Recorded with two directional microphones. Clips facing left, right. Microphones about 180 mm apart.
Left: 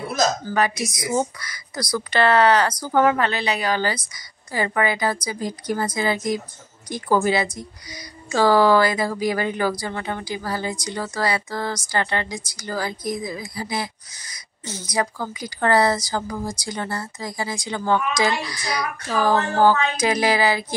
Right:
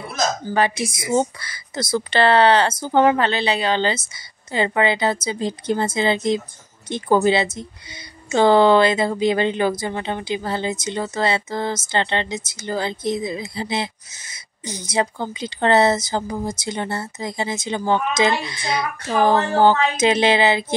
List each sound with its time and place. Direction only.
0.5 s speech: 30° right (ahead or behind)